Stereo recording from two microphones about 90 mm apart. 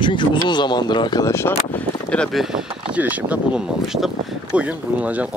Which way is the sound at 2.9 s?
15° right (ahead or behind).